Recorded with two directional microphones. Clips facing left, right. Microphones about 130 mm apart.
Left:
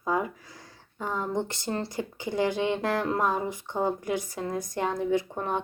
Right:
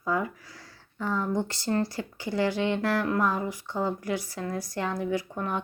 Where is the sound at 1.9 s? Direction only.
20° left (ahead or behind).